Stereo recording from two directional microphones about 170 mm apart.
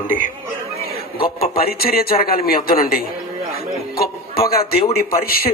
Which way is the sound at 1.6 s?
60° left (ahead or behind).